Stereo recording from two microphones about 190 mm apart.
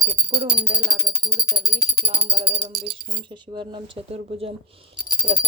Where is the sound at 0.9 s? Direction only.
20° right (ahead or behind); by 2.8 s 35° right (ahead or behind).